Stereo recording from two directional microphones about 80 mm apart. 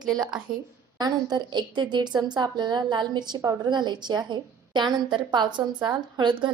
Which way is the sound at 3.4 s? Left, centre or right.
Right.